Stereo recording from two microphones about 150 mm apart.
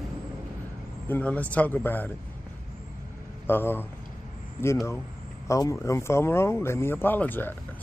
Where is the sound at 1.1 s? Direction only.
10° left (ahead or behind).